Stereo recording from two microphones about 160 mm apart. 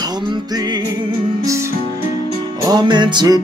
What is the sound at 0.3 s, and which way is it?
Music, 25° right (ahead or behind).